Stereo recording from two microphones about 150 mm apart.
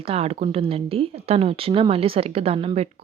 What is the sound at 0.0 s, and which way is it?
Speech, 40° right (ahead or behind).